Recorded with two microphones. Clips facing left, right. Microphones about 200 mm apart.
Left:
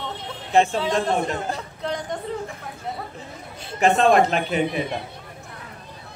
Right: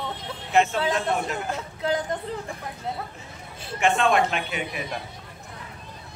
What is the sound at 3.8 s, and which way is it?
A man's voice, 40° left (ahead or behind).